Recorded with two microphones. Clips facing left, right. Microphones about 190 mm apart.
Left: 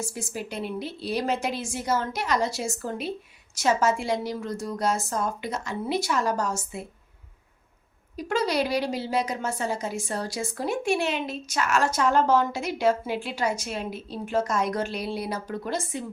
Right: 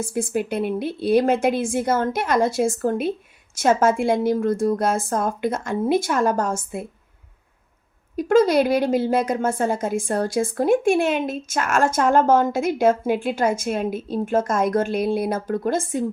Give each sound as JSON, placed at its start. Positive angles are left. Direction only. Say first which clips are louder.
{"t": 0.0, "sound": "a woman's voice", "louder": "right 10 dB", "side_deg": -55}
{"t": 8.1, "sound": "a woman's voice", "louder": "right 10 dB", "side_deg": -50}